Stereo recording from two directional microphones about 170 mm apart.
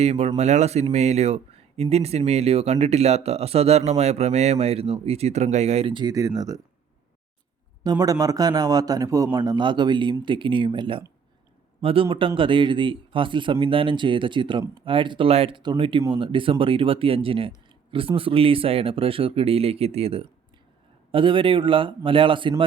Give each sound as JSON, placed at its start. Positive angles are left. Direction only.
{"t": 0.0, "sound": "speech", "side_deg": -40}
{"t": 7.9, "sound": "a man's voice", "side_deg": -20}